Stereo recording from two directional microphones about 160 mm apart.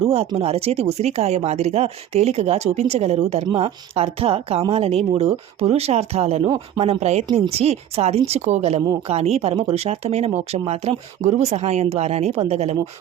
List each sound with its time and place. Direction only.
0.0 s speech: 40° right (ahead or behind)